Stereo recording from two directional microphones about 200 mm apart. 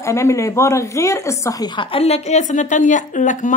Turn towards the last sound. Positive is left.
turn(degrees=40)  # may be behind; listen again after turning